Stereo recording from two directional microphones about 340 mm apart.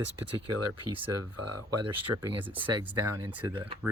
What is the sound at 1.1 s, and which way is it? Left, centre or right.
Speech, right.